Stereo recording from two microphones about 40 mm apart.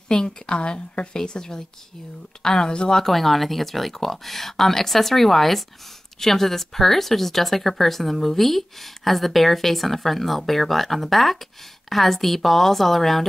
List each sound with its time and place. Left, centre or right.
0.1 s a woman's voice: left
3.0 s speech: centre